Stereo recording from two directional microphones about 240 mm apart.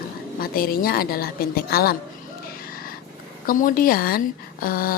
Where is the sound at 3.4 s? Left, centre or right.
Left.